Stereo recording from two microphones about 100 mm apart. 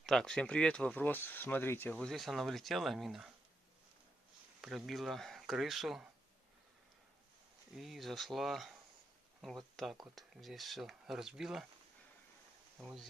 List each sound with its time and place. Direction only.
0.0 s speech: 5° left (ahead or behind); by 2.0 s 20° left (ahead or behind)
2.0 s speech: 5° left (ahead or behind)
4.6 s speech: centre (ahead or behind)
7.7 s speech: centre (ahead or behind)
12.7 s speech: centre (ahead or behind)